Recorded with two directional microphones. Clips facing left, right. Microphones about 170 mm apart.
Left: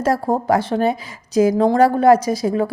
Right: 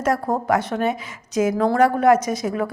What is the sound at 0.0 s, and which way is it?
A woman's voice, 30° left (ahead or behind).